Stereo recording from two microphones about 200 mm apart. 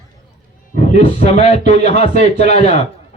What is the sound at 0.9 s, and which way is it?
A man's voice, 35° left (ahead or behind).